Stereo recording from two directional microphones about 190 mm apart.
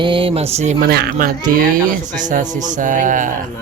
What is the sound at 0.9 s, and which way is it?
Speech, 55° right (ahead or behind).